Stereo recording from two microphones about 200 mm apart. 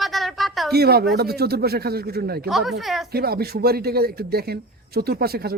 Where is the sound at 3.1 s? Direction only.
50° right (ahead or behind).